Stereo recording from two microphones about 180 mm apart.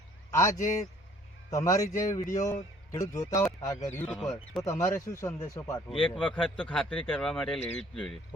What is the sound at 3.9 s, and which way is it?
Speech, 10° left (ahead or behind).